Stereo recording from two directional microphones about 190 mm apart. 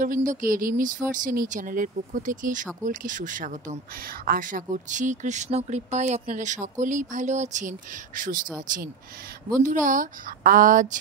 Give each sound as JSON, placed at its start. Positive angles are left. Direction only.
{"t": 0.0, "sound": "speech", "side_deg": -45}
{"t": 9.6, "sound": "speech", "side_deg": -45}